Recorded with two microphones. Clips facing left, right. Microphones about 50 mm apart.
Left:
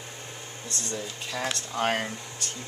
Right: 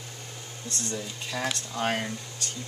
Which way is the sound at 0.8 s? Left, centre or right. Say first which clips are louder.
Left 1 dB; centre.